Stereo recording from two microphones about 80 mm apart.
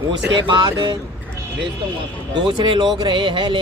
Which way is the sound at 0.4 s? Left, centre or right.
Right.